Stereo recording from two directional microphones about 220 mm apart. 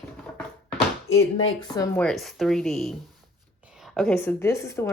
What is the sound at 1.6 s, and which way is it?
Speech, 15° left (ahead or behind).